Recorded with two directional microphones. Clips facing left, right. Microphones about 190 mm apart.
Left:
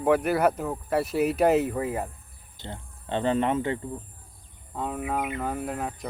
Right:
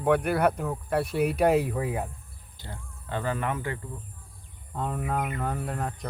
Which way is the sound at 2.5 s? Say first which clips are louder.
Left 4 dB; 25° left (ahead or behind).